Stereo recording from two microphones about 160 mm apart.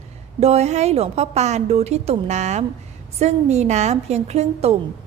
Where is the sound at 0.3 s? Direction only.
40° right (ahead or behind).